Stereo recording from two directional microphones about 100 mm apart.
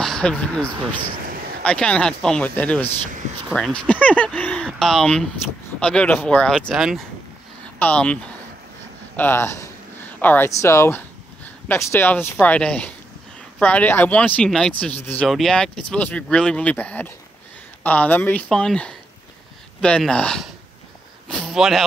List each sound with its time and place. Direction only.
0.0 s speech: 10° left (ahead or behind)
6.7 s speech: centre (ahead or behind)
7.8 s speech: 15° left (ahead or behind)
15.2 s speech: centre (ahead or behind); by 18.4 s 20° left (ahead or behind)
18.5 s speech: 5° left (ahead or behind)
21.3 s a sound: centre (ahead or behind)